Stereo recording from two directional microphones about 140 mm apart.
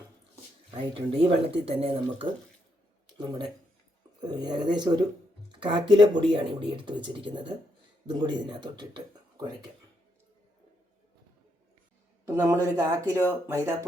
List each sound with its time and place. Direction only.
0.7 s speech: 40° right (ahead or behind)
3.2 s speech: 30° right (ahead or behind)
12.4 s speech: 25° right (ahead or behind)